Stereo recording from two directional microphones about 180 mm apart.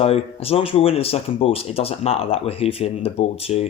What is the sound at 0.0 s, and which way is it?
Speech, 35° left (ahead or behind).